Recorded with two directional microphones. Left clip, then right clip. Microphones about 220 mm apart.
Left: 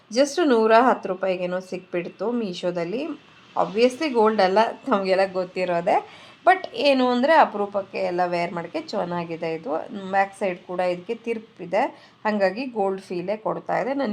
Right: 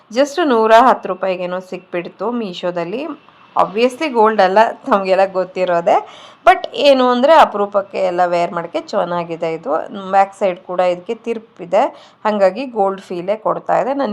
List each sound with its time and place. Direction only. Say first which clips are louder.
0.1 s a woman's voice: right 5 dB; 15° right (ahead or behind)